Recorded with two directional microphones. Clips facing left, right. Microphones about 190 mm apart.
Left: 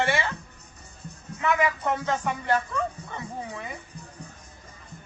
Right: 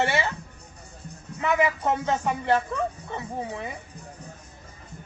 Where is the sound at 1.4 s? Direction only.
25° right (ahead or behind).